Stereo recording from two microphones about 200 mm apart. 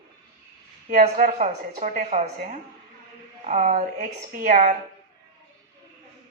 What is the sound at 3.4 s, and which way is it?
A woman's voice, 40° right (ahead or behind).